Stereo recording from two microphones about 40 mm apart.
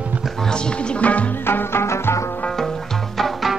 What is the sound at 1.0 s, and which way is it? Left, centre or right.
Music, left.